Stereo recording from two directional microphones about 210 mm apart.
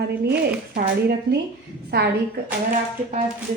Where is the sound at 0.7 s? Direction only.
50° right (ahead or behind).